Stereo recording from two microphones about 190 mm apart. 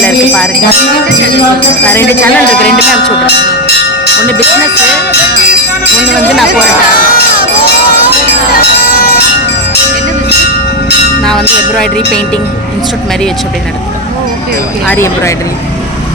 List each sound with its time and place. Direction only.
0.0 s bell: 5° left (ahead or behind)
1.8 s speech: 10° left (ahead or behind)
7.0 s a sound: 50° left (ahead or behind)
8.9 s bell: 50° left (ahead or behind)
11.2 s speech: centre (ahead or behind)
14.8 s speech: 15° left (ahead or behind)